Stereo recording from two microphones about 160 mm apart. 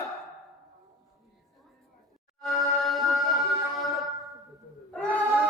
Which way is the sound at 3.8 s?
Centre (ahead or behind).